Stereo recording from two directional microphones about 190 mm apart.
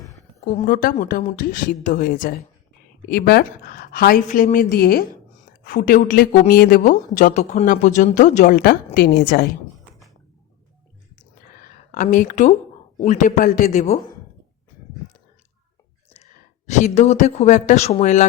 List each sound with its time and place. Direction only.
0.4 s speech: 45° left (ahead or behind)
3.1 s speech: 55° left (ahead or behind)
8.5 s speech: 50° left (ahead or behind)
11.6 s a sound: 40° left (ahead or behind)
13.0 s a man's voice: 40° left (ahead or behind)
16.2 s speech: 40° left (ahead or behind)